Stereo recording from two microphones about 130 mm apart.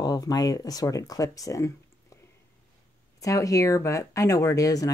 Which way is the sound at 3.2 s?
25° left (ahead or behind).